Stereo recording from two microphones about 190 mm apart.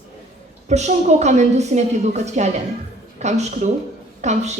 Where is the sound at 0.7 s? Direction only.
35° right (ahead or behind).